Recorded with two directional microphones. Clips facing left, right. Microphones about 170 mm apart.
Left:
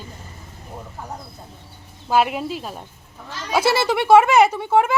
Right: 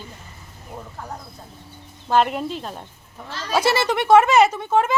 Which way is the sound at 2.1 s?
5° left (ahead or behind).